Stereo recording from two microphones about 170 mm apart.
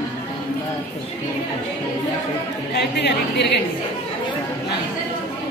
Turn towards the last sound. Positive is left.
turn(degrees=80)